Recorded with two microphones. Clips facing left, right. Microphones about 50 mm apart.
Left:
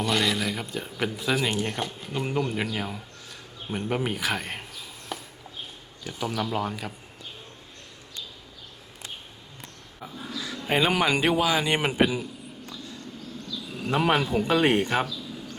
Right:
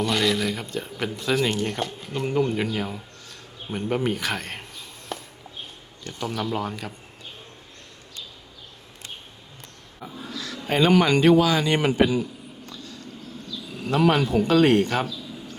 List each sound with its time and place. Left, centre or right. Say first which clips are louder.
0.0 s speech: right 2 dB; centre
5.1 s a sound: right 2 dB; centre
6.1 s speech: right 1 dB; centre
10.0 s speech: right 1 dB; centre
14.1 s speech: right 2 dB; centre